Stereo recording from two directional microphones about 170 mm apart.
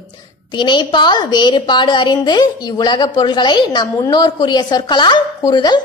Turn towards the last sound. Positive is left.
turn(degrees=25)  # may be behind; listen again after turning